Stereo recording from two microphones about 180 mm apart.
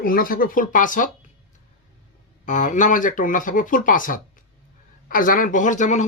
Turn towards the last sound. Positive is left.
turn(degrees=45)  # may be behind; listen again after turning